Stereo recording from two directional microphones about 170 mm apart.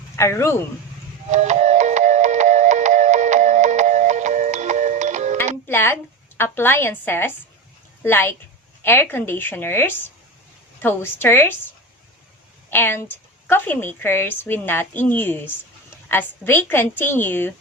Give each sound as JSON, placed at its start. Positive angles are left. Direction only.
{"t": 0.2, "sound": "a woman's voice", "side_deg": 15}
{"t": 1.3, "sound": "music", "side_deg": -40}
{"t": 5.6, "sound": "a woman's voice", "side_deg": 10}
{"t": 12.7, "sound": "a woman's voice", "side_deg": 15}